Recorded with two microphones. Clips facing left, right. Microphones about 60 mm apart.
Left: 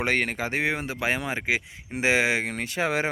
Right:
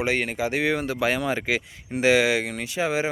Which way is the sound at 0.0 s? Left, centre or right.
Left.